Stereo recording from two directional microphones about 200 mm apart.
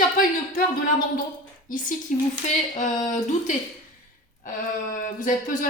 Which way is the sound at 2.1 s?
40° left (ahead or behind).